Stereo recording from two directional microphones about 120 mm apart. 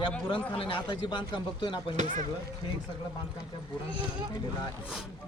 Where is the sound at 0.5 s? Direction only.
45° left (ahead or behind).